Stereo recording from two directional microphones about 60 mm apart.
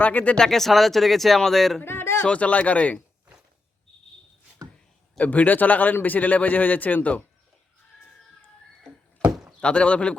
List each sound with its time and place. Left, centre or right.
0.0 s speech: left
0.3 s speech: centre
1.8 s a sound: left
2.2 s a man's voice: left
5.1 s a man's voice: left
9.2 s rowboat: centre
9.6 s a man's voice: centre